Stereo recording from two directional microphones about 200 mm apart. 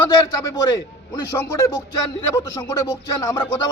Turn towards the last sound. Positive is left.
turn(degrees=15)  # may be behind; listen again after turning